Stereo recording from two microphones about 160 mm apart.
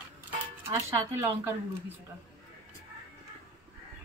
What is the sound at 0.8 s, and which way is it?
Speech, 20° right (ahead or behind).